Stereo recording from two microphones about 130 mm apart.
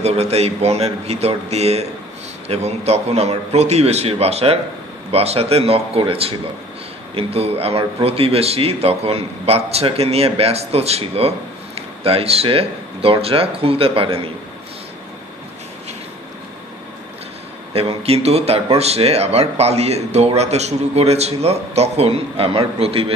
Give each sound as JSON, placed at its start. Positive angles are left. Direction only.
{"t": 0.0, "sound": "speech", "side_deg": -55}
{"t": 17.7, "sound": "speech", "side_deg": -50}